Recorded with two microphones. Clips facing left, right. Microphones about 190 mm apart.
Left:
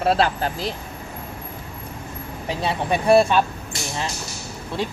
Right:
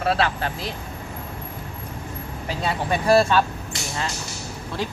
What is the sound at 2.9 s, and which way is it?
Speech, centre (ahead or behind).